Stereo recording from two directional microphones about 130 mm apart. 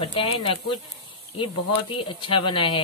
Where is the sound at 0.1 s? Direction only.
45° left (ahead or behind).